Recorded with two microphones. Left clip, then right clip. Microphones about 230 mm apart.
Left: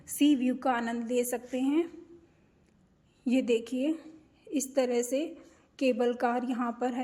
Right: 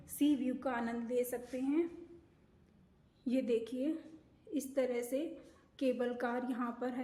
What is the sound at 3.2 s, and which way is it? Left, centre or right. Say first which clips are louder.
A woman's voice: left 7 dB; left.